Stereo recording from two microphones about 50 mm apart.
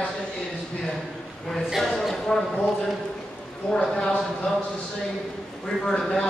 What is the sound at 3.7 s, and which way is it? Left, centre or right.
Speech, centre.